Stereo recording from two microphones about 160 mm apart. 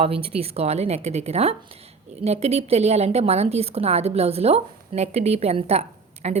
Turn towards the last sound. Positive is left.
turn(degrees=-40)  # may be behind; listen again after turning